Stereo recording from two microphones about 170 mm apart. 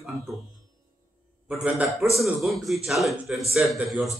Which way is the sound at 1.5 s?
5° right (ahead or behind).